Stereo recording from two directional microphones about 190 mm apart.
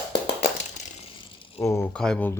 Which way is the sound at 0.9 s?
30° left (ahead or behind).